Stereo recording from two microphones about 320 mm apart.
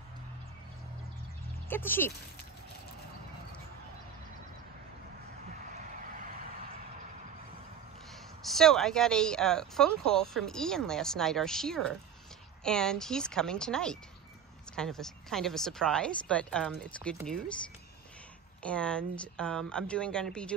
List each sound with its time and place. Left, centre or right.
1.7 s speech: centre
8.4 s speech: centre
18.6 s speech: centre